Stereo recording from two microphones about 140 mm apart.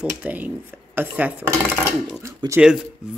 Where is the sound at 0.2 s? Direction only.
10° right (ahead or behind).